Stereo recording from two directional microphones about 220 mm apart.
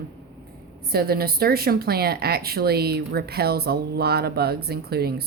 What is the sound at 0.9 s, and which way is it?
A woman's voice, 45° right (ahead or behind).